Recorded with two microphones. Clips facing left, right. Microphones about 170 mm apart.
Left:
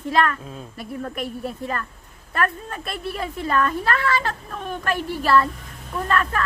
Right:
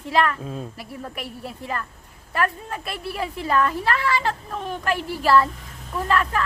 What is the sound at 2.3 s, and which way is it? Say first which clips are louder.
Speech: even; 15° right (ahead or behind).